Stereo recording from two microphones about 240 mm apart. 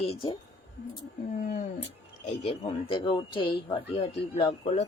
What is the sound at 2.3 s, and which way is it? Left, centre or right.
A woman's voice, left.